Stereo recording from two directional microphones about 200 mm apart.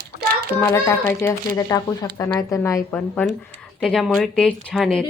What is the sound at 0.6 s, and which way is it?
A woman's voice, 15° left (ahead or behind).